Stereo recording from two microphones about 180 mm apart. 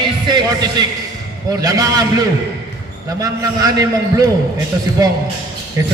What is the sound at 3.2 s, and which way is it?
A man's voice, 20° right (ahead or behind).